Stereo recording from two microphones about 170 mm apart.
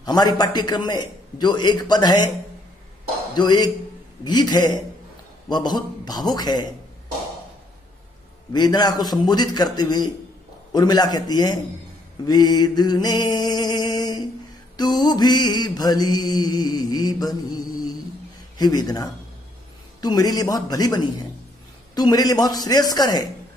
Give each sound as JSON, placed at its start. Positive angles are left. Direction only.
{"t": 0.0, "sound": "mantra", "side_deg": 25}
{"t": 3.3, "sound": "mantra", "side_deg": 25}
{"t": 8.5, "sound": "mantra", "side_deg": 25}
{"t": 18.6, "sound": "mantra", "side_deg": 25}